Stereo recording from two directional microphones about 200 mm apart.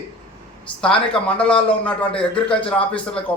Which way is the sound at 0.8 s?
5° left (ahead or behind).